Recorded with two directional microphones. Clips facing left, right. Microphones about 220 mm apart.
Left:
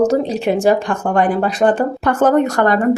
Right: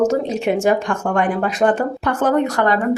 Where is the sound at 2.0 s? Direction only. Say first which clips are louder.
Left 4 dB; 45° left (ahead or behind).